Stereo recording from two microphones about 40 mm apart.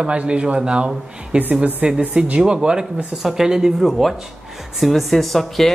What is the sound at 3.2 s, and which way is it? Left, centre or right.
Speech, centre.